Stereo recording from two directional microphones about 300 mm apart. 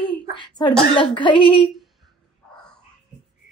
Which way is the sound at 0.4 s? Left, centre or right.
Centre.